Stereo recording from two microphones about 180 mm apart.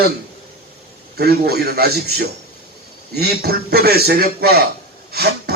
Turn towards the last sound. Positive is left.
turn(degrees=-60)  # may be behind; listen again after turning